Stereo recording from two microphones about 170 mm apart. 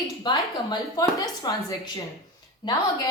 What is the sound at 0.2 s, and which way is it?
A woman's voice, 25° left (ahead or behind).